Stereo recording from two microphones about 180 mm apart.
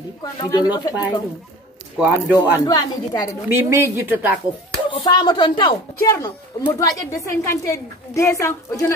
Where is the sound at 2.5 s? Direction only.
20° left (ahead or behind).